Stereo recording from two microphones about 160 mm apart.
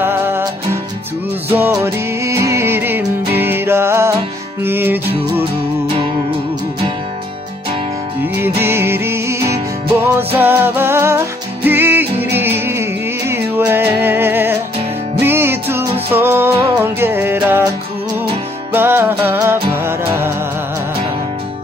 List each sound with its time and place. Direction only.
0.0 s music: 15° right (ahead or behind)
8.2 s music: 15° right (ahead or behind)
18.7 s music: 15° right (ahead or behind)